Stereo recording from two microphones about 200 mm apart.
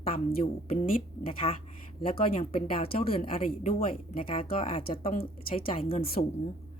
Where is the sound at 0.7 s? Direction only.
30° left (ahead or behind).